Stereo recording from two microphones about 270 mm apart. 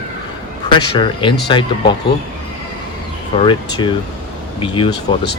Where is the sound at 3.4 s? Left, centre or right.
Centre.